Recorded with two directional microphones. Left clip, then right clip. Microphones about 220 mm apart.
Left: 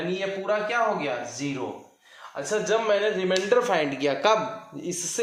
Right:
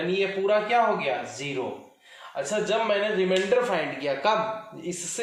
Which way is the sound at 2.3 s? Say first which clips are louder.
Left 1 dB; 25° left (ahead or behind).